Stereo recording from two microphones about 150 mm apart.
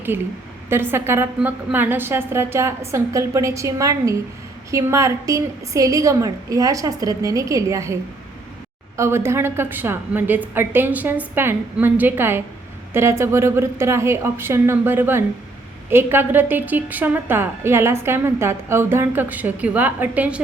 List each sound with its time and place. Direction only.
0.1 s a woman's voice: 15° right (ahead or behind)
9.0 s a woman's voice: 15° right (ahead or behind)